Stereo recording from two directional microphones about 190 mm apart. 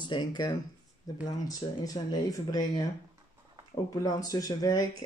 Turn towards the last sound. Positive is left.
turn(degrees=20)  # may be behind; listen again after turning